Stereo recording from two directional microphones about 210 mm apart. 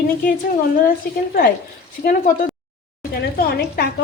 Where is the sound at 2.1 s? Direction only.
40° left (ahead or behind).